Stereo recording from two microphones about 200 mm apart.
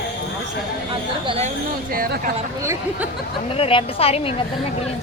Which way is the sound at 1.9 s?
45° right (ahead or behind).